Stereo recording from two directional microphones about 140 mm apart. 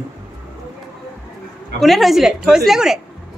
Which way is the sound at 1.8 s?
Centre (ahead or behind).